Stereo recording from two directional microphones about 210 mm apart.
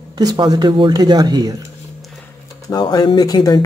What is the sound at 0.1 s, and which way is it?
Speech, 20° right (ahead or behind).